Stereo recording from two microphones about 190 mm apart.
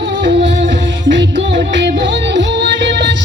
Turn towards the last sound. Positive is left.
turn(degrees=-65)  # may be behind; listen again after turning